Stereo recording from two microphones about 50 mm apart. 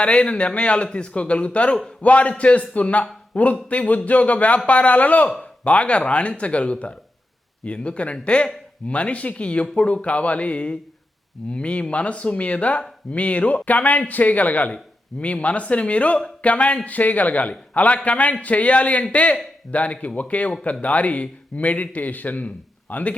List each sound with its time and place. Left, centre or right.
0.0 s a man's voice: left